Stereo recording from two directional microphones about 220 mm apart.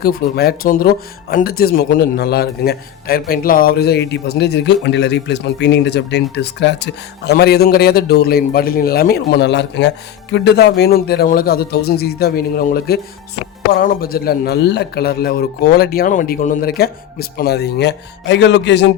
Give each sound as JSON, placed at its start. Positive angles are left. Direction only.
{"t": 0.0, "sound": "speech", "side_deg": 45}